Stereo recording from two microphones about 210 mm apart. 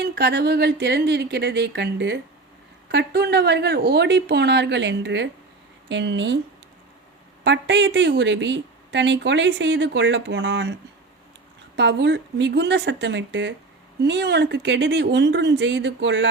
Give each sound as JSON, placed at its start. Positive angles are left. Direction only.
{"t": 0.0, "sound": "speech", "side_deg": -50}
{"t": 7.4, "sound": "speech", "side_deg": -60}
{"t": 11.8, "sound": "speech", "side_deg": -55}